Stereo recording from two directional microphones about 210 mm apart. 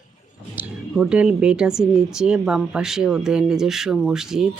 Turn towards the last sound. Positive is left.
turn(degrees=0)  # may be behind; listen again after turning